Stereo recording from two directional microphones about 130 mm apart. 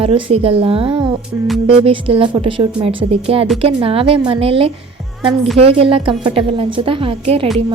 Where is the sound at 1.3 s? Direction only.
20° right (ahead or behind).